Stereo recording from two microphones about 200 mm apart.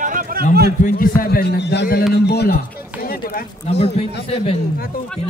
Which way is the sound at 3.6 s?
30° left (ahead or behind).